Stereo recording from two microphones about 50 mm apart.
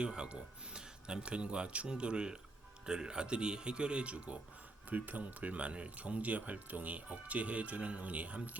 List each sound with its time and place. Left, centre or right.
0.0 s a man's voice: centre